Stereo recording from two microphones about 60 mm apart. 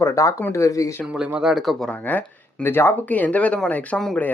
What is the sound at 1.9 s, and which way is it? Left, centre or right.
Speech, left.